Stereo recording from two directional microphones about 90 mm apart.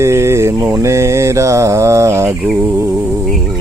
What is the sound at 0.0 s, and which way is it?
Mantra, 30° right (ahead or behind).